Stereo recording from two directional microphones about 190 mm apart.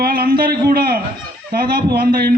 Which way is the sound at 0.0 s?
50° right (ahead or behind).